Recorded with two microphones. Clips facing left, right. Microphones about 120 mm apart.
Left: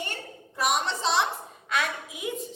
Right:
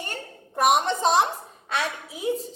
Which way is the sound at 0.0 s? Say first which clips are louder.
Right 1 dB; 50° right (ahead or behind).